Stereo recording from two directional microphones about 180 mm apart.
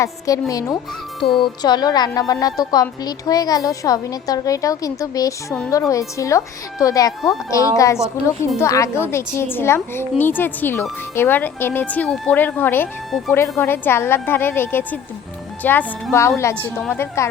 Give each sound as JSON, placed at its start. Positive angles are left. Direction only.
{"t": 0.0, "sound": "a woman's voice", "side_deg": 20}
{"t": 13.1, "sound": "speech", "side_deg": 0}
{"t": 13.3, "sound": "a woman's voice", "side_deg": 15}